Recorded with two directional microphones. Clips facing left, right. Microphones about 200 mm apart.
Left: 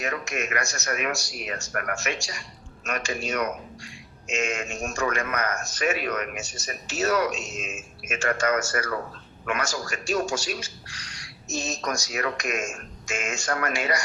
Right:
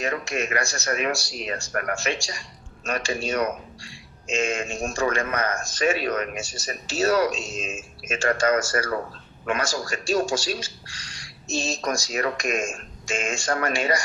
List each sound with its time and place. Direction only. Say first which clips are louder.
0.0 s a man's voice: right 3 dB; 30° right (ahead or behind)